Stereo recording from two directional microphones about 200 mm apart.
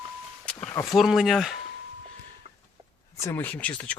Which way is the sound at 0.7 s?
15° left (ahead or behind).